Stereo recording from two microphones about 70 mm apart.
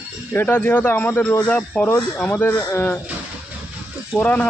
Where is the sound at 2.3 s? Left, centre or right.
Left.